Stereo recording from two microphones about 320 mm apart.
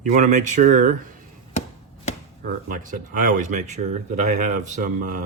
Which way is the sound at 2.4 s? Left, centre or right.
Right.